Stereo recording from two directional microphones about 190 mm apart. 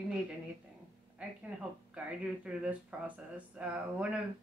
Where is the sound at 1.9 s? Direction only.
5° right (ahead or behind).